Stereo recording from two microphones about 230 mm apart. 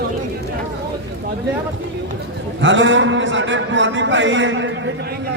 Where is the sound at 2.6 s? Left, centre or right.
Right.